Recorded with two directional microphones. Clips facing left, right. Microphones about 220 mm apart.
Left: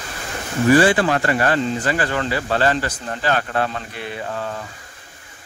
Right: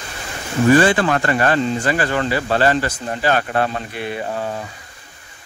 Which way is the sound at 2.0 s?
20° right (ahead or behind).